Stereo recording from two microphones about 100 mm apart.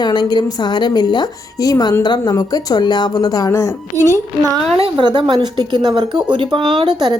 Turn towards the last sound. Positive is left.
turn(degrees=-50)  # may be behind; listen again after turning